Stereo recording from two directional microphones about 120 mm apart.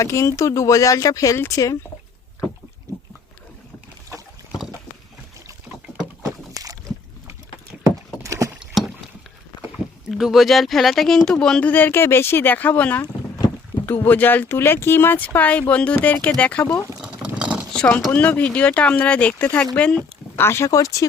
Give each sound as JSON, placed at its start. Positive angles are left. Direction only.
{"t": 0.0, "sound": "speech", "side_deg": 25}
{"t": 2.9, "sound": "pig", "side_deg": -30}
{"t": 6.2, "sound": "boat", "side_deg": -30}
{"t": 7.9, "sound": "vehicle", "side_deg": -25}
{"t": 8.5, "sound": "a sound", "side_deg": 0}
{"t": 9.6, "sound": "speech", "side_deg": 0}
{"t": 17.0, "sound": "a sound", "side_deg": -10}
{"t": 17.7, "sound": "speech", "side_deg": 10}
{"t": 20.4, "sound": "speech", "side_deg": 20}